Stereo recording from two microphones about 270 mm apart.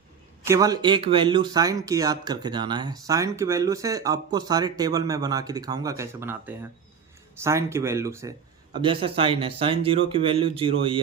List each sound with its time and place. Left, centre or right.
0.4 s speech: centre